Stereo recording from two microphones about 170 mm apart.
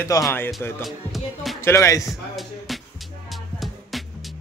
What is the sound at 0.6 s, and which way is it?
Speech, 15° left (ahead or behind).